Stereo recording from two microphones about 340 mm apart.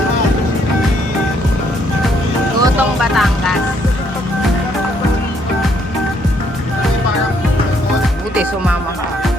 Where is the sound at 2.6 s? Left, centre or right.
Centre.